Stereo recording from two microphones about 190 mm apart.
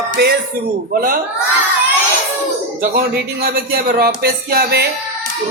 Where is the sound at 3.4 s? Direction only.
50° right (ahead or behind).